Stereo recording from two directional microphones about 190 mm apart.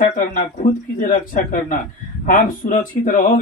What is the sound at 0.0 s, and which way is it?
Speech, 45° left (ahead or behind).